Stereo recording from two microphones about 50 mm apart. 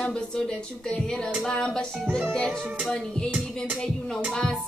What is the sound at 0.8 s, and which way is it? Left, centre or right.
Speech, centre.